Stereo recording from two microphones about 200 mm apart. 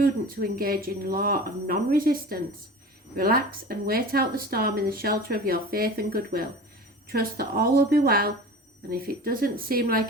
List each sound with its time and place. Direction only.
0.0 s speech: 50° right (ahead or behind)